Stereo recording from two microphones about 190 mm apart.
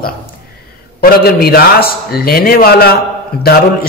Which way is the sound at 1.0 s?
55° left (ahead or behind).